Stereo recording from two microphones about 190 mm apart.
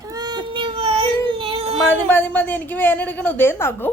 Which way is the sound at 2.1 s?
10° left (ahead or behind).